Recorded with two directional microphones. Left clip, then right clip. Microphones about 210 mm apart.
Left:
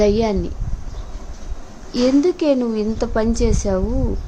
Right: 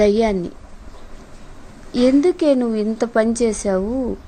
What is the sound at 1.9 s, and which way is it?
A woman's voice, 10° right (ahead or behind).